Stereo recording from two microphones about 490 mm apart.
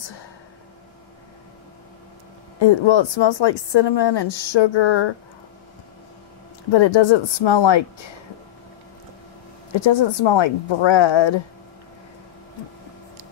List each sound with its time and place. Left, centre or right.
2.6 s speech: left
6.7 s speech: left
9.8 s speech: left